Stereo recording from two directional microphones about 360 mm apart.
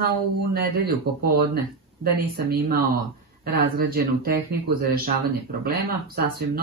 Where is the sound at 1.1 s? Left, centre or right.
Right.